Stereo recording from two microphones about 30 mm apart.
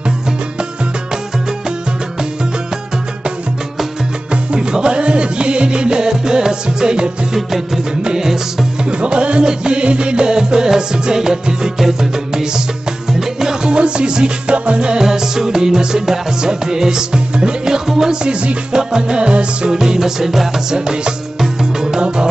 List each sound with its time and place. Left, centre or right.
4.6 s music: right
5.0 s music: right
7.3 s music: centre
8.0 s music: right
9.0 s music: right
13.7 s music: right
15.0 s music: centre; by 19.7 s right
19.7 s music: right
21.9 s music: right